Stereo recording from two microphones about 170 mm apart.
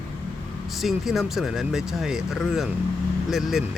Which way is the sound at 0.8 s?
Centre (ahead or behind).